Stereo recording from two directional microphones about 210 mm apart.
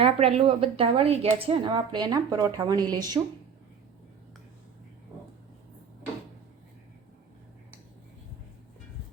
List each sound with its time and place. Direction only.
0.0 s a woman's voice: 30° right (ahead or behind)